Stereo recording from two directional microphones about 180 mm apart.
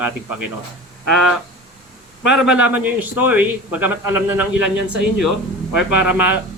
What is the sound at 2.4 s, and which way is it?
A man's voice, 5° right (ahead or behind).